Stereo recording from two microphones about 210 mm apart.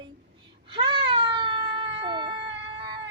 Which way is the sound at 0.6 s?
25° right (ahead or behind).